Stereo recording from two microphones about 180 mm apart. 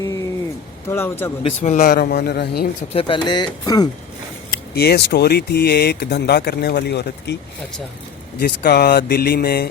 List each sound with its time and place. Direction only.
0.0 s a sound: 20° left (ahead or behind)
0.9 s a man's voice: 15° left (ahead or behind)
1.5 s speech: 40° left (ahead or behind)
1.9 s speech: 60° left (ahead or behind)
2.9 s speech: 30° left (ahead or behind)
4.7 s speech: 60° left (ahead or behind)
8.4 s speech: 60° left (ahead or behind)